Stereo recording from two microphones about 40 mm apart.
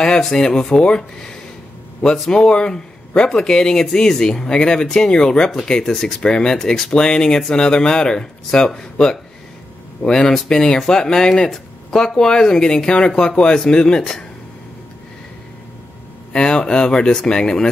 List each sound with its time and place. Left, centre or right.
0.0 s speech: centre
4.8 s speech: centre
5.1 s speech: left; by 6.1 s centre
6.2 s speech: centre
10.0 s speech: left
16.3 s speech: left